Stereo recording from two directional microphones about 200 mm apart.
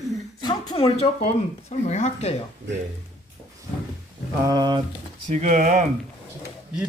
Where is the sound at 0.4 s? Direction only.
25° left (ahead or behind).